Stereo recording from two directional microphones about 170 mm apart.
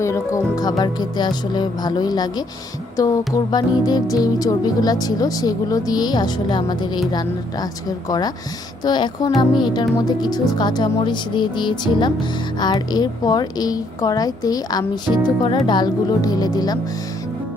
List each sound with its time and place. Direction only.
0.0 s a woman's voice: 15° left (ahead or behind)
8.8 s a woman's voice: 25° left (ahead or behind)